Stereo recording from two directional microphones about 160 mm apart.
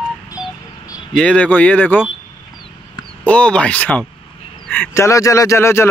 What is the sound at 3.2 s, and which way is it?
A man's voice, 5° left (ahead or behind).